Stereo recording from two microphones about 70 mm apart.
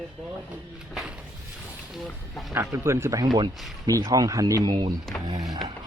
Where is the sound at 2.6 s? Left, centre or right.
Right.